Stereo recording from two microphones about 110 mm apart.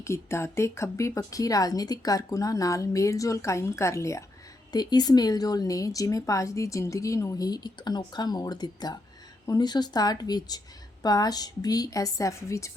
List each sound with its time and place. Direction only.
0.0 s speech: 25° left (ahead or behind)
4.7 s a woman's voice: 40° left (ahead or behind)